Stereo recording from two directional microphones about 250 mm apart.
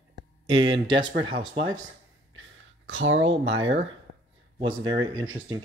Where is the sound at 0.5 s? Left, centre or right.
Right.